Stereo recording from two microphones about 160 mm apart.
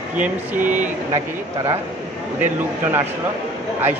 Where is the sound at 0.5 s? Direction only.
55° right (ahead or behind).